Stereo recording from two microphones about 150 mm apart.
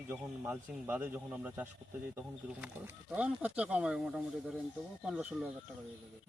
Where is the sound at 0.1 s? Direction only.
10° right (ahead or behind).